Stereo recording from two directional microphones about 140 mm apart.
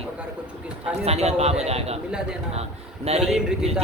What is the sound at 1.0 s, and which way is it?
A man's voice, 50° right (ahead or behind).